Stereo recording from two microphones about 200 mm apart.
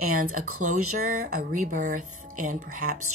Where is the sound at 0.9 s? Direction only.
45° right (ahead or behind).